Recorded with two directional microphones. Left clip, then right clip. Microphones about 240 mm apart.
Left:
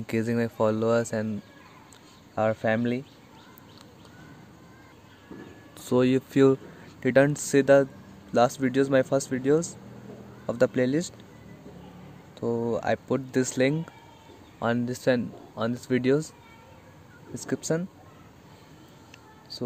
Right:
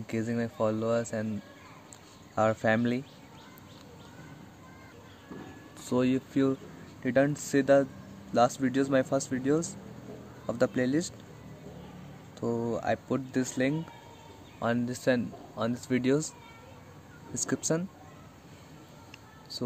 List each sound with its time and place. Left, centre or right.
0.0 s speech: left
2.3 s speech: centre
5.8 s speech: left
12.4 s speech: centre
17.3 s speech: centre
19.5 s a sound: centre